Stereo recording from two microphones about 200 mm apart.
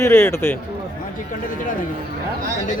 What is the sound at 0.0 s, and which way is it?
Speech, 10° left (ahead or behind).